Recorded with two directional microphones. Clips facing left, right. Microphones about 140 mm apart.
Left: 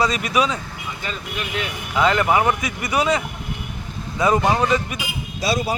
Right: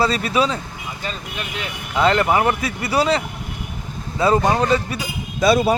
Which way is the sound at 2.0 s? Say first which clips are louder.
Right 1 dB; 35° right (ahead or behind).